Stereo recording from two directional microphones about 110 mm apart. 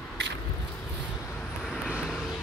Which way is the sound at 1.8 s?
10° right (ahead or behind).